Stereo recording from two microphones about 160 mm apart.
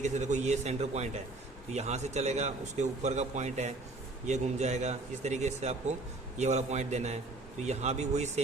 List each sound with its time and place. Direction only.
0.0 s a man's voice: 45° right (ahead or behind)